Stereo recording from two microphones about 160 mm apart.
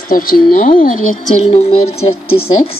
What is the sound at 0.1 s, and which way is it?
Speech, 65° left (ahead or behind).